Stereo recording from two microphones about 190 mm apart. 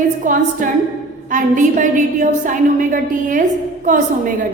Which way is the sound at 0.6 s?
45° right (ahead or behind).